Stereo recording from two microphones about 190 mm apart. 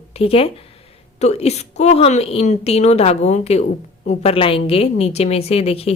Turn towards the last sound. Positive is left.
turn(degrees=30)  # may be behind; listen again after turning